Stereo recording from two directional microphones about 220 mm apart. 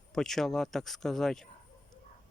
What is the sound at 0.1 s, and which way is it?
Speech, centre (ahead or behind).